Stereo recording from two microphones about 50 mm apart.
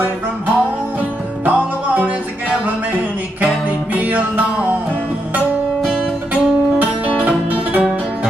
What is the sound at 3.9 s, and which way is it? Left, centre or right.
Music, right.